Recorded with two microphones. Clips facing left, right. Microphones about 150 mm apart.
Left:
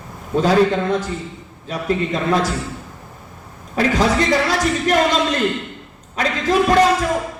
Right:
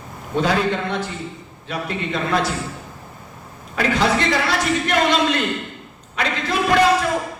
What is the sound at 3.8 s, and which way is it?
A man's voice, 40° left (ahead or behind).